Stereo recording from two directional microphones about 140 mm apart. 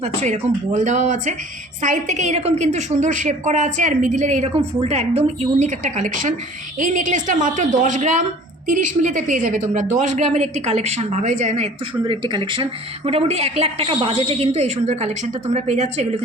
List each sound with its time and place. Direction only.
0.0 s a woman's voice: 55° right (ahead or behind)
12.0 s speech: 35° right (ahead or behind)
13.1 s a woman's voice: 45° right (ahead or behind)